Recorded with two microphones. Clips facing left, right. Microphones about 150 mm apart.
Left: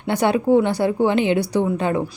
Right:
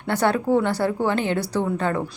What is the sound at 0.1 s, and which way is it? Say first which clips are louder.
A woman's voice: left 3 dB; 15° left (ahead or behind).